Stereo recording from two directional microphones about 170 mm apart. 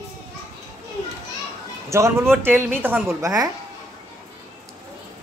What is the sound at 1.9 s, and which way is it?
A woman's voice, 15° right (ahead or behind).